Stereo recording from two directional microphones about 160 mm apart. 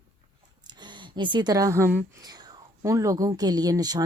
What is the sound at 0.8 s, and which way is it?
Speech, 30° right (ahead or behind).